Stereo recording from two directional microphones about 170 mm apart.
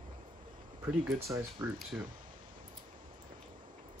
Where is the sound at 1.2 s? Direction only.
15° right (ahead or behind).